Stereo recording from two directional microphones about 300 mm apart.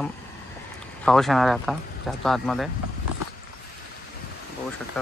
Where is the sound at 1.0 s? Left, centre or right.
Centre.